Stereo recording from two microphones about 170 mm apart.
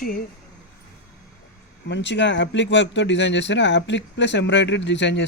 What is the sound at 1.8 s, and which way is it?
Speech, 90° left.